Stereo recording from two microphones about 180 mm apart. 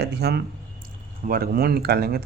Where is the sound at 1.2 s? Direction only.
55° right (ahead or behind).